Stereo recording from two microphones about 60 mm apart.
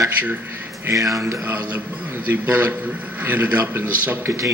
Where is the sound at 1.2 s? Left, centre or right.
Right.